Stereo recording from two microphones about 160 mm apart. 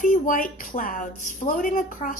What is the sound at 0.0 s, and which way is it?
A woman's voice, 60° left (ahead or behind).